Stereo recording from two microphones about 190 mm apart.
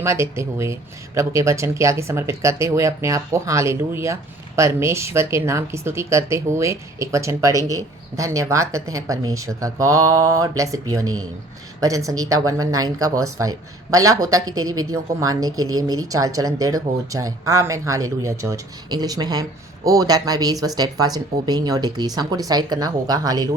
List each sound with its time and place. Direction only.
0.0 s speech: 15° right (ahead or behind)